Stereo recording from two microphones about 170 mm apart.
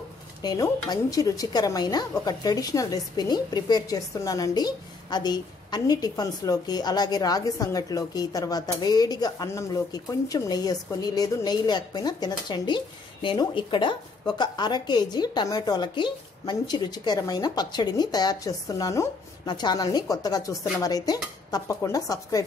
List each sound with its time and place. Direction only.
0.4 s a woman's voice: 25° left (ahead or behind)